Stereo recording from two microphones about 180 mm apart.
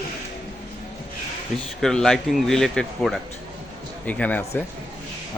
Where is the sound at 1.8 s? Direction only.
5° left (ahead or behind).